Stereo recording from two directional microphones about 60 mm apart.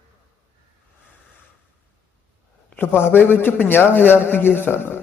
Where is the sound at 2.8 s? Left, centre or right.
Left.